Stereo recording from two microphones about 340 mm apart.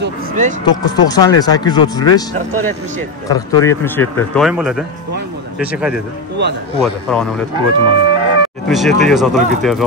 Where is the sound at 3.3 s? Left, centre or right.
Centre.